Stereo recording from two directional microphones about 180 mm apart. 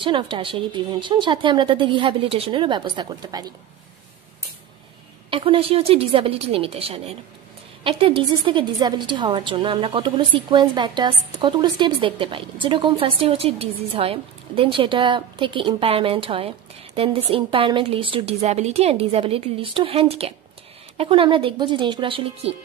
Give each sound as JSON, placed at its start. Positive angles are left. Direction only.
{"t": 0.0, "sound": "a woman's voice", "side_deg": -25}
{"t": 5.3, "sound": "a woman's voice", "side_deg": -30}